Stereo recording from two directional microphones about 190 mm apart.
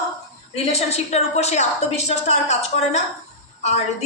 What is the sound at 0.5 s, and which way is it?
A woman's voice, 35° left (ahead or behind).